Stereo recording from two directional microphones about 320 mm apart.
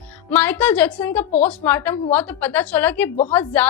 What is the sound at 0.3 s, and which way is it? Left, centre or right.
A woman's voice, centre.